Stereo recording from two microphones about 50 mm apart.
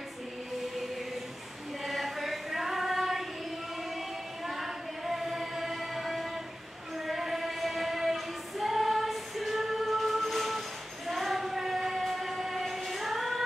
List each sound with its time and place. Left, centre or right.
1.9 s choir: centre
4.5 s a sound: centre
7.1 s singing: centre
11.1 s train: centre